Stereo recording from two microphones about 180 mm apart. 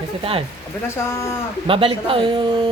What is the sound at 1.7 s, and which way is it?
A woman's voice, 30° right (ahead or behind).